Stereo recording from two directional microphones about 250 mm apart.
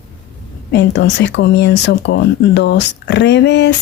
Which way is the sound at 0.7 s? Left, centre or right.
Left.